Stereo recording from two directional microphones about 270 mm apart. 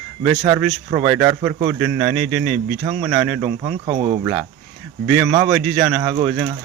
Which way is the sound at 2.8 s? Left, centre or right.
Centre.